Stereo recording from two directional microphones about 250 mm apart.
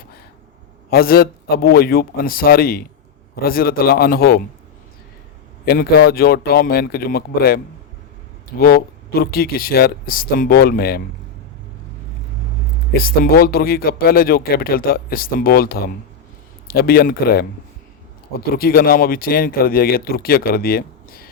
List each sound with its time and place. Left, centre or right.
0.9 s speech: left
5.6 s speech: left
12.9 s speech: left